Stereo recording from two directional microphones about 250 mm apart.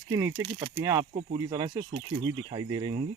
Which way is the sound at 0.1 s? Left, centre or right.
Centre.